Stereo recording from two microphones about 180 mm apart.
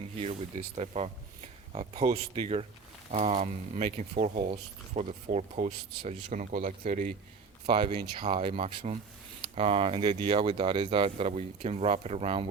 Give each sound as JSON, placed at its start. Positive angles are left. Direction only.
{"t": 0.2, "sound": "speech", "side_deg": -35}
{"t": 6.3, "sound": "speech", "side_deg": -45}
{"t": 7.7, "sound": "speech", "side_deg": -30}